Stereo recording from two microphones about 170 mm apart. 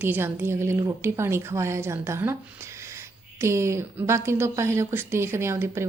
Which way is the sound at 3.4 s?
15° right (ahead or behind).